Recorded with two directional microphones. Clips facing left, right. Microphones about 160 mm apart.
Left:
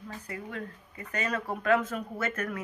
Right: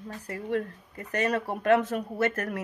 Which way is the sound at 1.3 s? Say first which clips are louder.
Right 3 dB; 35° right (ahead or behind).